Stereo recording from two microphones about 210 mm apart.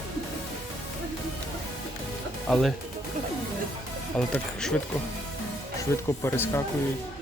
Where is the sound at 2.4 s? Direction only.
Centre (ahead or behind).